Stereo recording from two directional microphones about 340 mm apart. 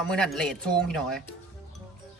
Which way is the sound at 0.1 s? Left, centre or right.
Centre.